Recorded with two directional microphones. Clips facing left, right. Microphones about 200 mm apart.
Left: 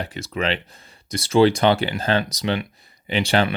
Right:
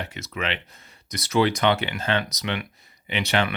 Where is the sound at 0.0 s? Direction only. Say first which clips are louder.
Left 5 dB; 35° left (ahead or behind).